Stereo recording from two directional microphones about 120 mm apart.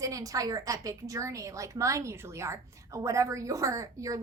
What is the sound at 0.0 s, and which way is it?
A woman's voice, 30° right (ahead or behind).